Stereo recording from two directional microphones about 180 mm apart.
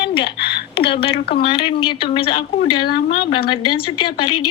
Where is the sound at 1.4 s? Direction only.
30° left (ahead or behind).